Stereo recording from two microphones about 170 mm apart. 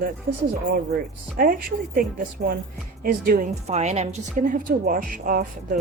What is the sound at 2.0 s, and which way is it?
Speech, 55° right (ahead or behind).